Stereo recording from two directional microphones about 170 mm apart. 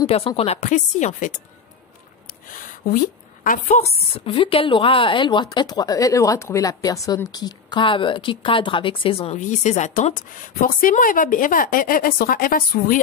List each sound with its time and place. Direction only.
0.0 s a woman's voice: 35° left (ahead or behind); by 13.0 s 55° left (ahead or behind)